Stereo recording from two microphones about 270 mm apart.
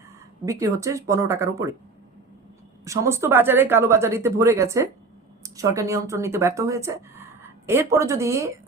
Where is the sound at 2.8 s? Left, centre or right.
Centre.